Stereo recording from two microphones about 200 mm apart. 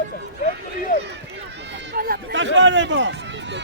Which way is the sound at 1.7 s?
55° right (ahead or behind).